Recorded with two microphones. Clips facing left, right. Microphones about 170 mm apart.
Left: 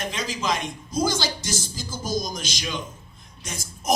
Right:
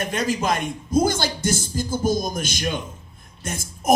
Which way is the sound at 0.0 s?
50° right (ahead or behind).